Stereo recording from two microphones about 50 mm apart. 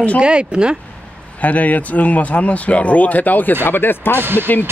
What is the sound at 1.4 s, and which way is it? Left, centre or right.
Speech, left.